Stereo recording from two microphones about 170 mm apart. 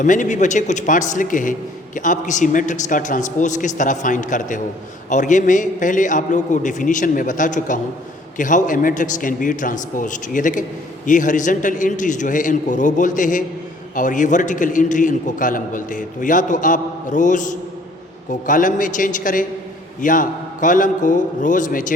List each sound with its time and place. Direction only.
0.0 s a man's voice: 50° left (ahead or behind)